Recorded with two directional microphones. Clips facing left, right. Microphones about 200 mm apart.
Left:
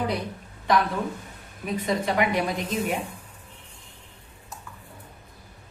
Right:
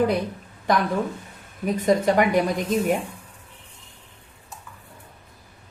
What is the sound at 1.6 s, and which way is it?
A woman's voice, 45° right (ahead or behind).